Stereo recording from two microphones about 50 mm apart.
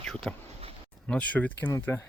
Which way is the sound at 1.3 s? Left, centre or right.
Left.